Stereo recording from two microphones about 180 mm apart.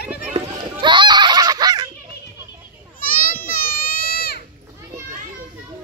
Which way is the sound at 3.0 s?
50° left (ahead or behind).